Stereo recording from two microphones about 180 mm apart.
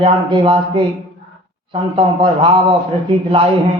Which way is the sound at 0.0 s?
30° right (ahead or behind).